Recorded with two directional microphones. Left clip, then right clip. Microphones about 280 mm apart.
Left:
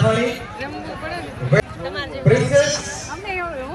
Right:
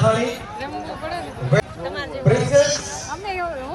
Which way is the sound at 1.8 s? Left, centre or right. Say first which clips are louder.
Left 1 dB; right.